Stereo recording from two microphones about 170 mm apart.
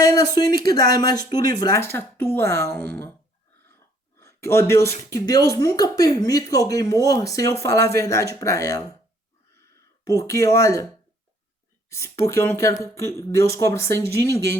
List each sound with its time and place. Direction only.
0.1 s speech: 20° left (ahead or behind)
4.2 s speech: 15° left (ahead or behind)
10.0 s speech: 20° left (ahead or behind)
11.9 s speech: 15° left (ahead or behind)